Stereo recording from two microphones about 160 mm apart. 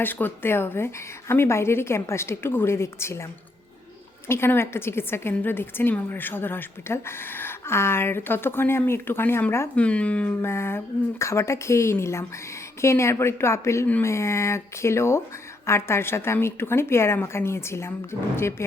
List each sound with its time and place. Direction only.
0.0 s a woman's voice: 10° left (ahead or behind)
4.3 s a woman's voice: 15° left (ahead or behind)